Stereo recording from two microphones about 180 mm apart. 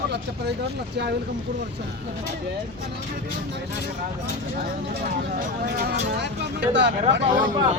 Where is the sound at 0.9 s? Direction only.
70° right (ahead or behind).